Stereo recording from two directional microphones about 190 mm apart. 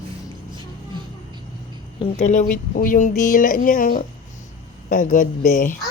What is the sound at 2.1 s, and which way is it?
Speech, 40° left (ahead or behind).